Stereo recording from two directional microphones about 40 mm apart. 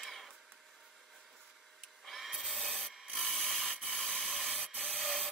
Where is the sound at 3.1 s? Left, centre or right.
Centre.